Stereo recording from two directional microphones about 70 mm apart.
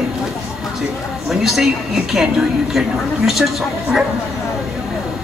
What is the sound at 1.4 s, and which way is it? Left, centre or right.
Speech, centre.